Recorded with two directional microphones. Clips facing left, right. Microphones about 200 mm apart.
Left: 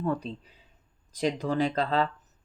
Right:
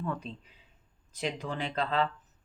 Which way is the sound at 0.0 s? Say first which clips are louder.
Left 6 dB; 35° left (ahead or behind).